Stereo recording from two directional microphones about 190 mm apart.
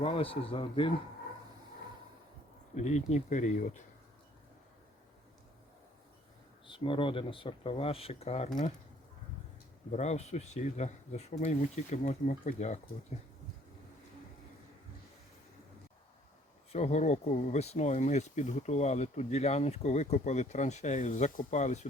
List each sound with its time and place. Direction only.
0.0 s speech: 30° left (ahead or behind)
2.7 s speech: 40° left (ahead or behind)
6.7 s speech: 25° left (ahead or behind)
9.9 s speech: 35° left (ahead or behind)
16.7 s speech: 35° left (ahead or behind)